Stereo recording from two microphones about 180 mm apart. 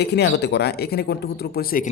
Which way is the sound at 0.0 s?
65° left (ahead or behind).